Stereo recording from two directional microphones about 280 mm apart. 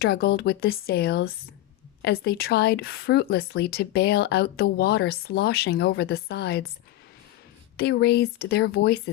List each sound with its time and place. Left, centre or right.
0.0 s speech: left
7.8 s speech: left